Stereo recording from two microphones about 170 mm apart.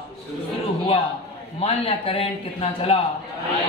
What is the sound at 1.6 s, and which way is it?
A man's voice, 35° left (ahead or behind).